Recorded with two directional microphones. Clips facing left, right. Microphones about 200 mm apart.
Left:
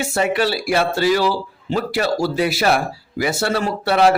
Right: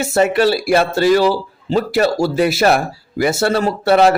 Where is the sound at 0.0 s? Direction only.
45° right (ahead or behind).